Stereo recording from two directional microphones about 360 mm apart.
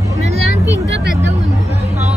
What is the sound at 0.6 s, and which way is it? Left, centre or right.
Speech, right.